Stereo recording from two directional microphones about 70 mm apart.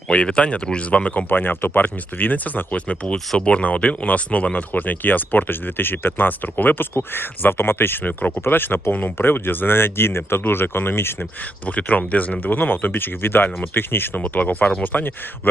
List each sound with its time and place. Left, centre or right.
0.1 s speech: centre; by 11.3 s left
11.6 s speech: left